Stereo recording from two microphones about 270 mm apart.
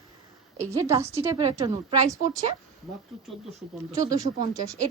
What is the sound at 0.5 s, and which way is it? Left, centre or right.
A woman's voice, centre.